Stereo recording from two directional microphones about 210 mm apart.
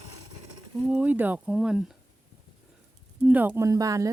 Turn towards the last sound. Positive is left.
turn(degrees=-15)  # may be behind; listen again after turning